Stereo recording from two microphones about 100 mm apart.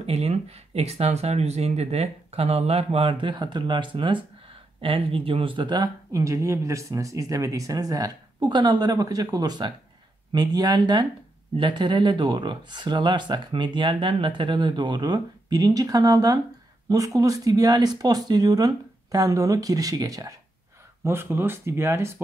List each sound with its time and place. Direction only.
0.0 s speech: 90° right; by 5.9 s 50° right (ahead or behind)
6.1 s speech: 30° right (ahead or behind)
21.0 s speech: 25° right (ahead or behind)